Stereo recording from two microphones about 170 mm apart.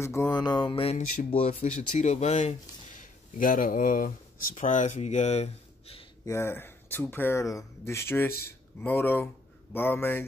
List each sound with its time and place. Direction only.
0.0 s mantra: 15° left (ahead or behind); by 1.0 s 35° left (ahead or behind)
1.3 s speech: 40° left (ahead or behind)
6.2 s speech: 15° left (ahead or behind)